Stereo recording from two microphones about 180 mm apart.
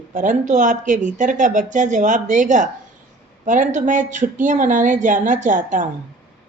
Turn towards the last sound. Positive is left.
turn(degrees=-45)  # may be behind; listen again after turning